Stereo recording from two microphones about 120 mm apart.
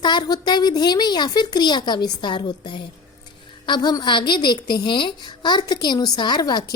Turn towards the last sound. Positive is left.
turn(degrees=35)  # may be behind; listen again after turning